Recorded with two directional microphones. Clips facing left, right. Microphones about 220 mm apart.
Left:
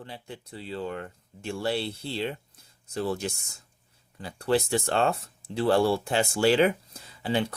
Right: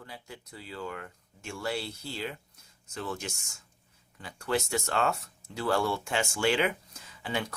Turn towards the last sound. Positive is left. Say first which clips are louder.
# left 6 dB
turn(degrees=35)  # may be behind; listen again after turning